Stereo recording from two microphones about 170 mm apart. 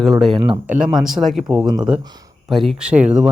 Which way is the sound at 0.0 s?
Centre (ahead or behind).